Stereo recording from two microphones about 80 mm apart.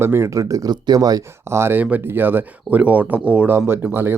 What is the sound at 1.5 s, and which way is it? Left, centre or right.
Speech, right.